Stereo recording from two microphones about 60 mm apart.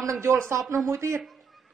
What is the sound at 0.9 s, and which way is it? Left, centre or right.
Speech, right.